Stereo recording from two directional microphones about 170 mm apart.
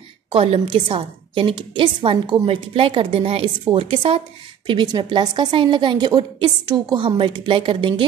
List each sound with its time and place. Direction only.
0.3 s a woman's voice: 35° right (ahead or behind)